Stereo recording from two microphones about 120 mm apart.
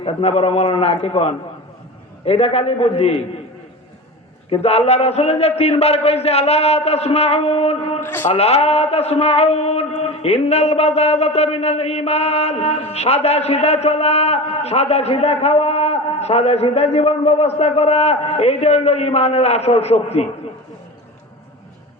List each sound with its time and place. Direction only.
0.0 s a man's voice: 55° left (ahead or behind)
4.4 s a man's voice: 55° left (ahead or behind)
8.0 s a man's voice: 20° left (ahead or behind)
8.3 s a man's voice: 60° left (ahead or behind)